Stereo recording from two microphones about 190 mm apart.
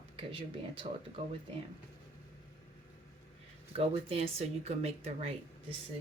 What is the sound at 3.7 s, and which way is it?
Speech, 30° right (ahead or behind).